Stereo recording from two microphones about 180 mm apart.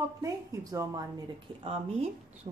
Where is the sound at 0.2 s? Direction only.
20° right (ahead or behind).